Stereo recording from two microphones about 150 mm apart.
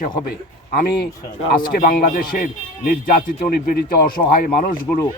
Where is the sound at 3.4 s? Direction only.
80° left.